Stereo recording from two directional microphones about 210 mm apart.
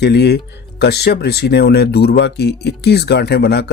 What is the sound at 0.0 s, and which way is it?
Speech, 50° left (ahead or behind).